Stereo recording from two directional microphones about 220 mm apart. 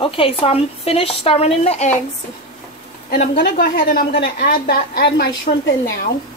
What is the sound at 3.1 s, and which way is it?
A woman's voice, 40° left (ahead or behind).